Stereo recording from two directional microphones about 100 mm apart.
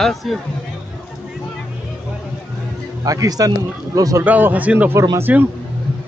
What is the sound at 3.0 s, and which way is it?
Speech, 40° right (ahead or behind).